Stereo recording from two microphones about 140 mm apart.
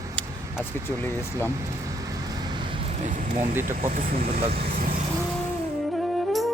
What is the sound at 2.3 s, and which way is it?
Vehicle, 30° right (ahead or behind).